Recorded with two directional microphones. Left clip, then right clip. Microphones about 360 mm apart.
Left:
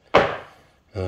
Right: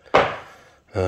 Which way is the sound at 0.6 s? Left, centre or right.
Centre.